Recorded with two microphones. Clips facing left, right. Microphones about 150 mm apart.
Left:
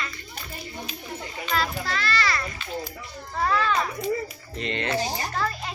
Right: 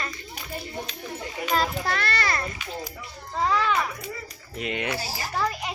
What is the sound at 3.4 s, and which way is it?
Children playing, 15° right (ahead or behind).